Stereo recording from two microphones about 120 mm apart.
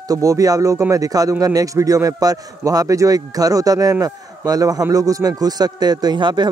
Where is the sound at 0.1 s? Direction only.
30° right (ahead or behind).